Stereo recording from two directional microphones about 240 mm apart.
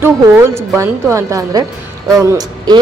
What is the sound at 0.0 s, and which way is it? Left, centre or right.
Speech, centre.